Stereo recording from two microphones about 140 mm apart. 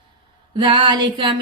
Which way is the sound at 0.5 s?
35° right (ahead or behind).